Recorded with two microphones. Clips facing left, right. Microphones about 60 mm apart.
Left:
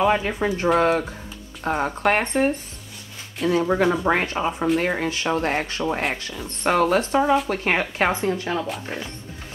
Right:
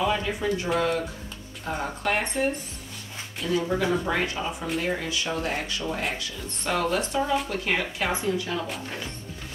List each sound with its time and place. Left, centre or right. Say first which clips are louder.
0.0 s speech: left 5 dB; left
8.8 s speech: left 3 dB; left